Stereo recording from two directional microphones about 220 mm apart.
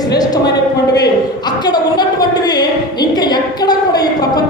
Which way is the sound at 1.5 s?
20° left (ahead or behind).